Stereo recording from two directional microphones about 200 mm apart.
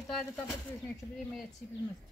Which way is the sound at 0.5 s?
5° left (ahead or behind).